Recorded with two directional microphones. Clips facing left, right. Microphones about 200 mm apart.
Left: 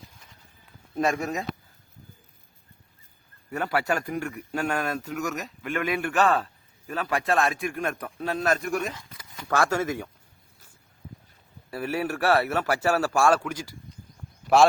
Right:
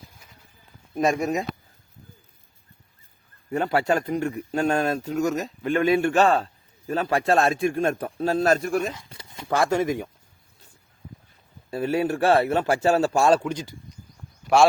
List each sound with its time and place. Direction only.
0.9 s a man's voice: 15° right (ahead or behind)
3.5 s a man's voice: 25° right (ahead or behind)
11.7 s a man's voice: 25° right (ahead or behind)
14.5 s speech: centre (ahead or behind)